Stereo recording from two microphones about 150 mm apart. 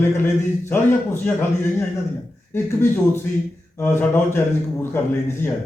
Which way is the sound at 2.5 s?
15° left (ahead or behind).